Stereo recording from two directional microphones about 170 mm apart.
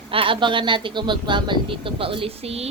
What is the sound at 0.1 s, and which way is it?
Speech, 30° right (ahead or behind).